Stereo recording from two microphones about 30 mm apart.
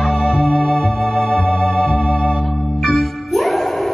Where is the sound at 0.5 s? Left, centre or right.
Centre.